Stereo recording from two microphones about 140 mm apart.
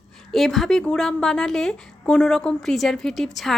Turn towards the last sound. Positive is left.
turn(degrees=0)  # may be behind; listen again after turning